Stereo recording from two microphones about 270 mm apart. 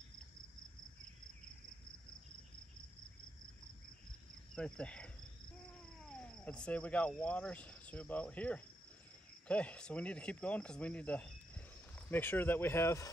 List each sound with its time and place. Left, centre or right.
4.6 s speech: centre
6.0 s cricket: centre
9.5 s speech: centre